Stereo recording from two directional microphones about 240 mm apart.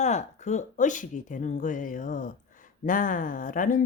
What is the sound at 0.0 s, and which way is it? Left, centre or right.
Speech, left.